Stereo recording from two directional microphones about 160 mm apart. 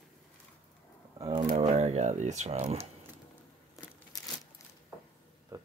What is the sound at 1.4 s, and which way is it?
Speech, 45° right (ahead or behind).